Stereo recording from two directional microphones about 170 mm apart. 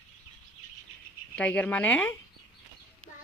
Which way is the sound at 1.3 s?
5° left (ahead or behind).